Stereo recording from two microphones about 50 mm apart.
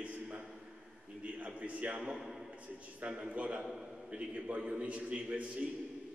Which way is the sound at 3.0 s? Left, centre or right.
Right.